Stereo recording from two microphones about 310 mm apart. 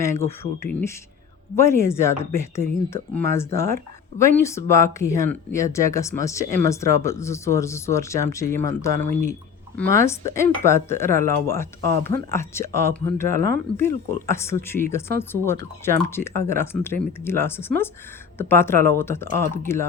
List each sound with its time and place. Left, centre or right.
0.0 s speech: centre
9.9 s speech: centre
13.3 s speech: right
13.7 s speech: centre